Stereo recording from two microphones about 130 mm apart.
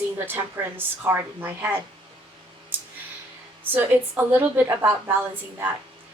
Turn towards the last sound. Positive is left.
turn(degrees=-20)  # may be behind; listen again after turning